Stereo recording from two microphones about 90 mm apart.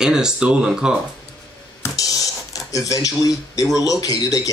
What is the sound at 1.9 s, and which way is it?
Speech, 40° left (ahead or behind).